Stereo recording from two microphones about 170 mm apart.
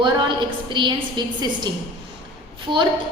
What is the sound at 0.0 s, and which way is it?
A woman's voice, 30° right (ahead or behind).